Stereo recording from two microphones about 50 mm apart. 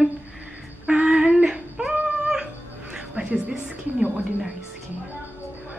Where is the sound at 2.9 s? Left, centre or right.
Centre.